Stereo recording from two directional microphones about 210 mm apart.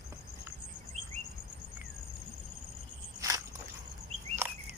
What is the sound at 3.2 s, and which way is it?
Walk, 15° right (ahead or behind).